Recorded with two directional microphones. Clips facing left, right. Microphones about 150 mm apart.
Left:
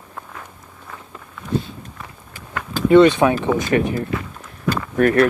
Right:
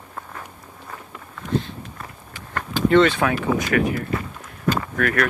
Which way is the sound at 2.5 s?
15° left (ahead or behind).